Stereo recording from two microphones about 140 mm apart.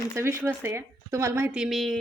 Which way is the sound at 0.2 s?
20° right (ahead or behind).